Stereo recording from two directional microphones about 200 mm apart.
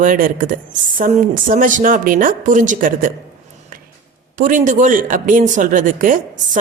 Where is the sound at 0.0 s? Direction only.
40° right (ahead or behind).